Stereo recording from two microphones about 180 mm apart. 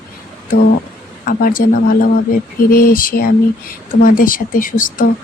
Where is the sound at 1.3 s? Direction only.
50° left (ahead or behind).